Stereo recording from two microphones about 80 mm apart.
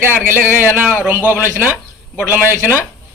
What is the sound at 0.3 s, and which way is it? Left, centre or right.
A man's voice, right.